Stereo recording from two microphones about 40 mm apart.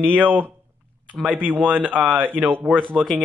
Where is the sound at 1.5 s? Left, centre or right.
Right.